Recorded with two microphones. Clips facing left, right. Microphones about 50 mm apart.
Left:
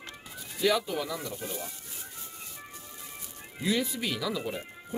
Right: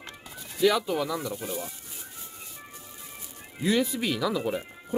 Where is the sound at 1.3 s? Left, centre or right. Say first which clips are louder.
Right 3 dB; centre.